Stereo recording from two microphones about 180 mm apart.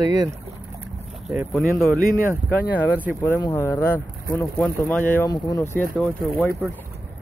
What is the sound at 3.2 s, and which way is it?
Speech, 10° left (ahead or behind).